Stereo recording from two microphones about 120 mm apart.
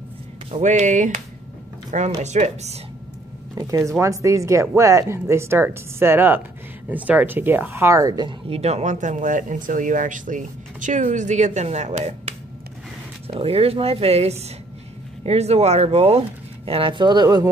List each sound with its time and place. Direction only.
0.6 s speech: 80° right
1.9 s speech: 80° right
2.2 s speech: 70° right (ahead or behind)
3.5 s speech: 25° right (ahead or behind)
8.5 s speech: 60° right (ahead or behind)
13.3 s speech: 55° right (ahead or behind); by 17.5 s 35° right (ahead or behind)